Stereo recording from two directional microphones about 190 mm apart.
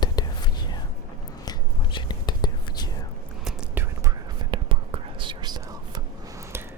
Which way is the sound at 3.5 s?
10° right (ahead or behind).